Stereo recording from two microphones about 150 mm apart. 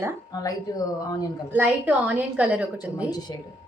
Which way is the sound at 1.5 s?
10° right (ahead or behind).